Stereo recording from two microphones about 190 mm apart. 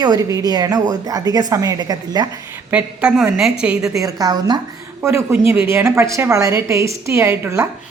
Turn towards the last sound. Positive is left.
turn(degrees=-15)  # may be behind; listen again after turning